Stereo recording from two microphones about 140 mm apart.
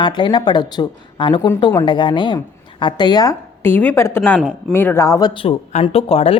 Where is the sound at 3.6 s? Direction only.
15° left (ahead or behind).